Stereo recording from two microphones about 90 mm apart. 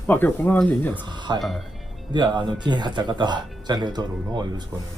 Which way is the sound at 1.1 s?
55° right (ahead or behind).